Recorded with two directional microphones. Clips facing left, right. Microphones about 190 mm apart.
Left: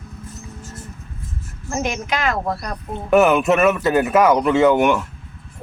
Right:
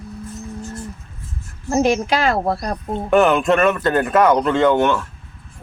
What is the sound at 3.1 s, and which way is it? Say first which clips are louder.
A man's voice: even; 5° left (ahead or behind).